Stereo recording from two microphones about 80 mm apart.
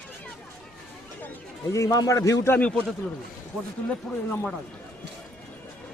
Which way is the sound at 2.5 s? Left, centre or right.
Centre.